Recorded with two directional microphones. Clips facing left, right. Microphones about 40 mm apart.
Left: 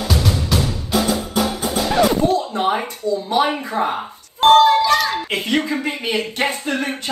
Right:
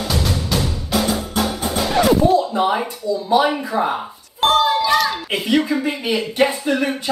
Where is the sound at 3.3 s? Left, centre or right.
Left.